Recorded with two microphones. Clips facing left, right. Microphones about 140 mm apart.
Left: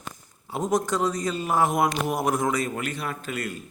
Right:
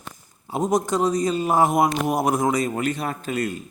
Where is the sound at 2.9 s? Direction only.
45° right (ahead or behind).